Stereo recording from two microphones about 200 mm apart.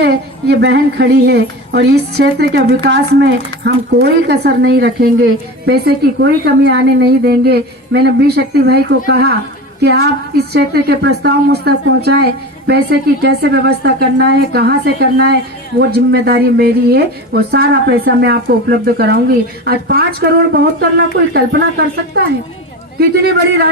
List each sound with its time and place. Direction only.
0.0 s a woman's voice: 55° right (ahead or behind)
23.0 s a woman's voice: 50° right (ahead or behind)